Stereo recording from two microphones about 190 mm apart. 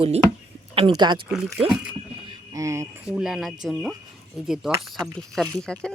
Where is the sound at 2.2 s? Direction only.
20° right (ahead or behind).